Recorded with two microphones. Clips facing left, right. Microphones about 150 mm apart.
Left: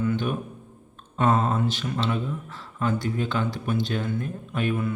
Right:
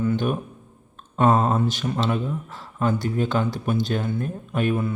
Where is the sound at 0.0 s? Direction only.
40° right (ahead or behind).